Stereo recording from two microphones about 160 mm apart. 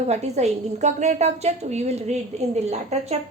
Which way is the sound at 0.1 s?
45° right (ahead or behind).